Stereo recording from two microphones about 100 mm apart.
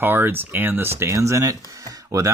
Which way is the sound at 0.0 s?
20° right (ahead or behind).